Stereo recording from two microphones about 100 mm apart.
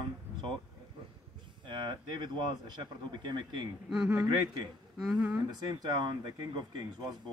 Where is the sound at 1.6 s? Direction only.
50° right (ahead or behind).